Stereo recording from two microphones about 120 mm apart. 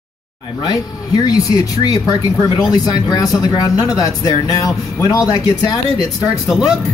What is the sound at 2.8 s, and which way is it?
Speech, 35° left (ahead or behind).